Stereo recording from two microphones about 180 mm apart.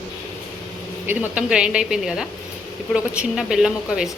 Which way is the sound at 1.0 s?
5° right (ahead or behind).